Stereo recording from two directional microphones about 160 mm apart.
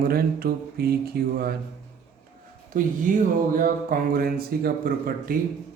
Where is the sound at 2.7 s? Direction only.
60° right (ahead or behind).